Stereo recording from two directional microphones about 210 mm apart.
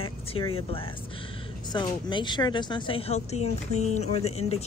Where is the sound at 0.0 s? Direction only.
25° left (ahead or behind).